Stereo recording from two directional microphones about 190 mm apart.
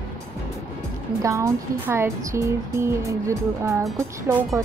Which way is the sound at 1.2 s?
15° right (ahead or behind).